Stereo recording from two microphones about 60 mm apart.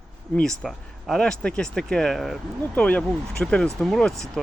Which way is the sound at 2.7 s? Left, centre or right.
Centre.